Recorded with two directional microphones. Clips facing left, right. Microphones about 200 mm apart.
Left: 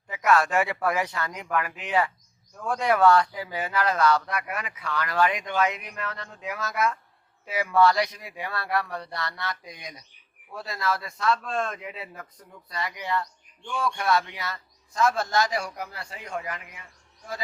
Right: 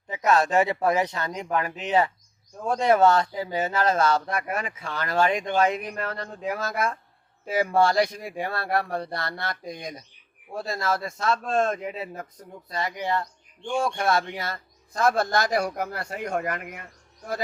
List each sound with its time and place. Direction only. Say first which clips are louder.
0.3 s speech: right 2 dB; 20° right (ahead or behind)
7.4 s speech: even; 45° right (ahead or behind)
13.0 s speech: right 2 dB; 30° right (ahead or behind)
14.0 s speech: right 1 dB; 50° right (ahead or behind)